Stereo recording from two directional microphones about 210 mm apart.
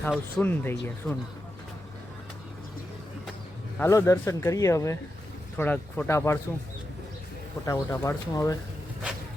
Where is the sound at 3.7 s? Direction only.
10° left (ahead or behind).